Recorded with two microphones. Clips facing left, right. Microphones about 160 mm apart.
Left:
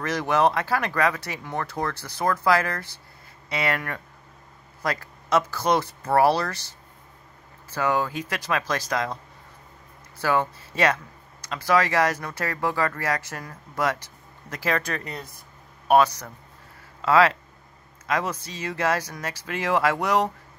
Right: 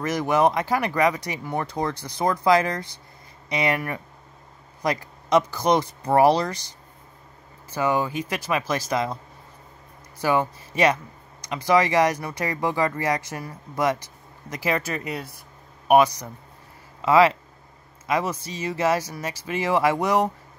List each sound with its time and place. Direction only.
0.0 s speech: 10° right (ahead or behind)
7.7 s speech: 10° right (ahead or behind)
10.2 s speech: 10° right (ahead or behind)